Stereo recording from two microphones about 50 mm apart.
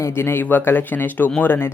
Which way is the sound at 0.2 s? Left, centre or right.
Left.